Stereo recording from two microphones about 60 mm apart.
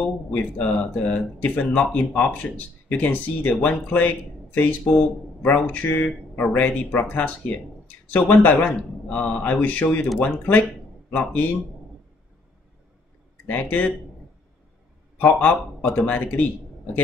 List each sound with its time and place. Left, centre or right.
0.6 s speech: left
8.6 s a man's voice: centre
13.5 s speech: left
15.1 s a man's voice: left